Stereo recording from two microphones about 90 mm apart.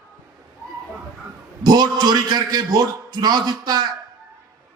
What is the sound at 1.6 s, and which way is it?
A man's voice, 50° right (ahead or behind).